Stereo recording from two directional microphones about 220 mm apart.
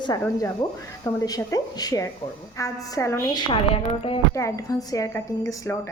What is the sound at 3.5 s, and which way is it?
Speech, 25° left (ahead or behind).